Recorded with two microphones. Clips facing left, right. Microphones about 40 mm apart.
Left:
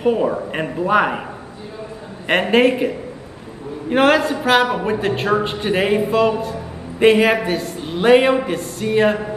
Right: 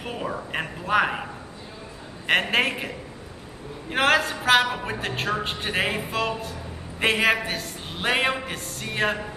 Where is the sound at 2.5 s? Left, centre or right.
Centre.